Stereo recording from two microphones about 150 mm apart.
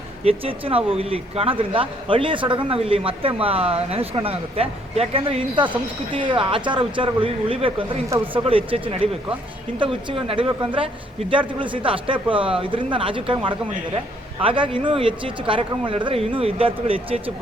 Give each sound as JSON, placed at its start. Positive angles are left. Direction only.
{"t": 0.3, "sound": "speech", "side_deg": -40}